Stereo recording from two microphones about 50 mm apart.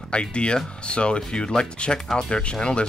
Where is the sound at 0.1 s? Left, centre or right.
Left.